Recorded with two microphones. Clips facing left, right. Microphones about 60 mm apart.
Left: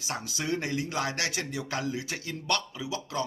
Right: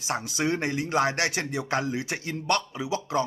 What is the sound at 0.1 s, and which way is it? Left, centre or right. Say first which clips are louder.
Speech: right 5 dB; right.